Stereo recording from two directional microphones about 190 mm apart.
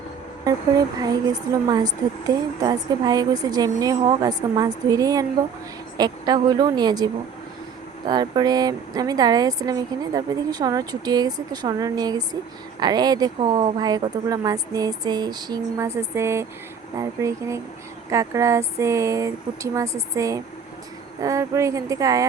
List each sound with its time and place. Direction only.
0.9 s speech: 20° right (ahead or behind)